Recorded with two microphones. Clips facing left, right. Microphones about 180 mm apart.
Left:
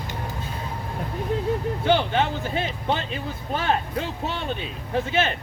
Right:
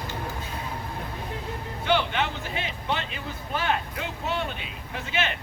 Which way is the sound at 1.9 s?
35° left (ahead or behind).